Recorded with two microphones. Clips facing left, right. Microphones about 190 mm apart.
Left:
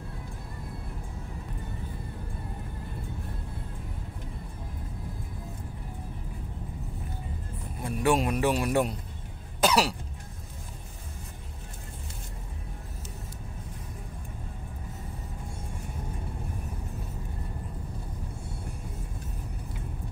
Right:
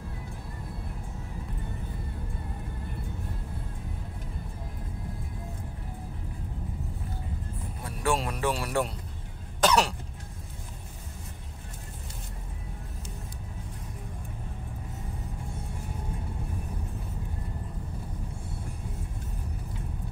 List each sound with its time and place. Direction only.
7.8 s speech: 20° left (ahead or behind)
9.6 s cough: 10° left (ahead or behind)